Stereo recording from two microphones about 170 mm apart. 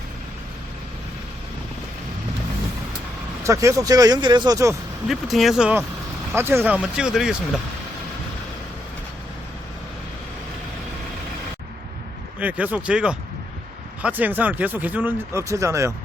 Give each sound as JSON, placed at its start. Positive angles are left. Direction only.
{"t": 3.4, "sound": "speech", "side_deg": -15}
{"t": 5.0, "sound": "speech", "side_deg": 0}
{"t": 12.4, "sound": "speech", "side_deg": -10}